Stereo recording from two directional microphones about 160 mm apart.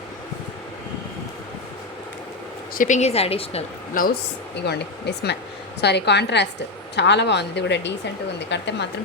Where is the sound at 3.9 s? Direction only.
60° left (ahead or behind).